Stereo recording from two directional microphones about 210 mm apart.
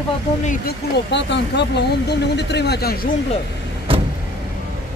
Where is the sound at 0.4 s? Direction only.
35° left (ahead or behind).